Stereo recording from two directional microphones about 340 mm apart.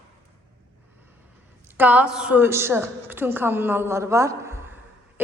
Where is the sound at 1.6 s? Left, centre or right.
Centre.